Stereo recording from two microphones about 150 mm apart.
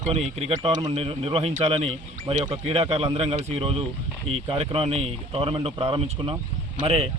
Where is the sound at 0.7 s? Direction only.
30° right (ahead or behind).